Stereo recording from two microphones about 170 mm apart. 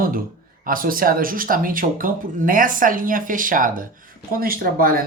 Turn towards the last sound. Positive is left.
turn(degrees=-60)  # may be behind; listen again after turning